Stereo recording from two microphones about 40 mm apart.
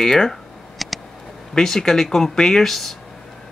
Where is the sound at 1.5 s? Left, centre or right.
Centre.